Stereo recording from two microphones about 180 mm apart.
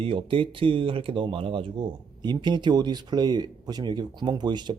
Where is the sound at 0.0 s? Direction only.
30° right (ahead or behind).